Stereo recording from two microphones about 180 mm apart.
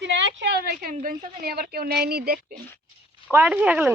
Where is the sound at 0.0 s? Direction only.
80° right; by 2.6 s 60° right (ahead or behind).